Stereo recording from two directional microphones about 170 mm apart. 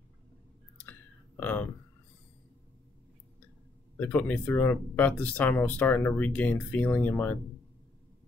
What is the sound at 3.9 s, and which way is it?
Speech, 10° left (ahead or behind).